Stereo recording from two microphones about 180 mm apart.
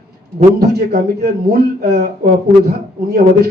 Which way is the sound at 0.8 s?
60° right (ahead or behind).